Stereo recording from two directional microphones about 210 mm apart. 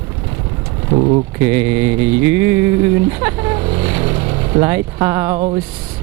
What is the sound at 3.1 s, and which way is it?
Speech, 15° right (ahead or behind).